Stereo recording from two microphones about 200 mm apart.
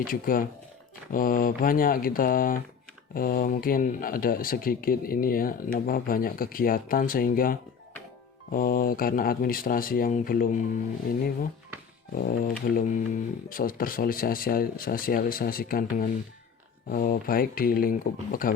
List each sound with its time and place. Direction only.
0.1 s speech: 45° left (ahead or behind)
12.1 s speech: 45° left (ahead or behind)